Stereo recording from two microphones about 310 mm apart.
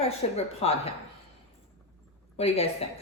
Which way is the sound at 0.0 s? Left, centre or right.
Centre.